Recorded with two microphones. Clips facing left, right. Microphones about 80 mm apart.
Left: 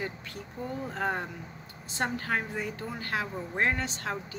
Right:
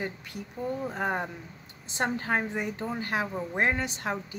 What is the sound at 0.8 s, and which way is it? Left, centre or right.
A woman's voice, centre.